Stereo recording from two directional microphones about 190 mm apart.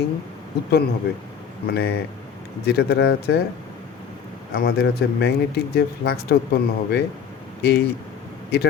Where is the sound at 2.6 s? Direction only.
60° left (ahead or behind).